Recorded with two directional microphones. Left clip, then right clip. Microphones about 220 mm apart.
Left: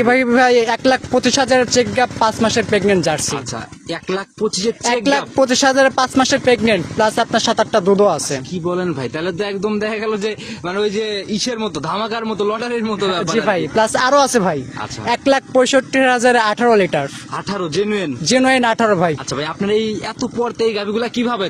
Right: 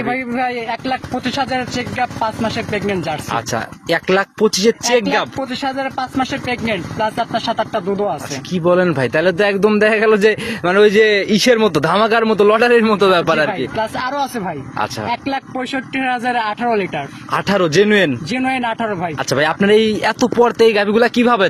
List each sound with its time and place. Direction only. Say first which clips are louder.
0.1 s speech: left 8 dB; 50° left (ahead or behind)
3.9 s a man's voice: right 8 dB; 40° right (ahead or behind)
5.4 s speech: left 9 dB; 50° left (ahead or behind)
8.6 s a man's voice: right 8 dB; 35° right (ahead or behind)
13.5 s speech: left 5 dB; 50° left (ahead or behind)
17.3 s a man's voice: right 7 dB; 35° right (ahead or behind)
18.4 s speech: left 4 dB; 50° left (ahead or behind)
19.3 s a man's voice: right 6 dB; 35° right (ahead or behind)